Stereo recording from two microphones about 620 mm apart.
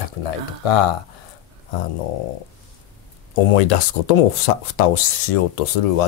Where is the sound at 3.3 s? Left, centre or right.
Left.